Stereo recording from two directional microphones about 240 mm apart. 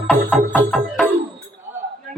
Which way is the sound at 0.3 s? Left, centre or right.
Centre.